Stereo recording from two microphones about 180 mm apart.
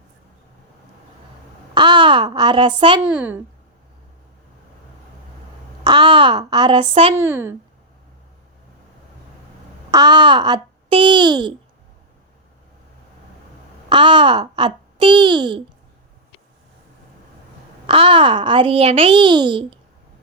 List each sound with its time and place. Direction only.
1.7 s speech: 25° right (ahead or behind)
3.0 s a woman's voice: 5° right (ahead or behind)
5.8 s speech: 25° right (ahead or behind)
7.2 s a woman's voice: 15° right (ahead or behind)
9.9 s a child's voice: 25° right (ahead or behind)
13.9 s a child's voice: 30° right (ahead or behind)
17.8 s a child's voice: 30° right (ahead or behind)